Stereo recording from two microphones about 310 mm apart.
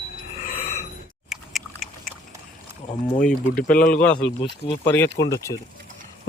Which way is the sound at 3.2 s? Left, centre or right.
Centre.